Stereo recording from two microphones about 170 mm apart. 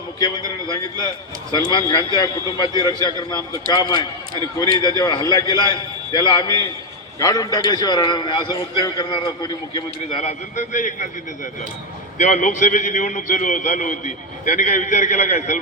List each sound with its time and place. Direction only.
0.7 s a man's voice: 25° left (ahead or behind)
10.2 s a man's voice: 45° left (ahead or behind)
12.1 s a man's voice: 45° left (ahead or behind)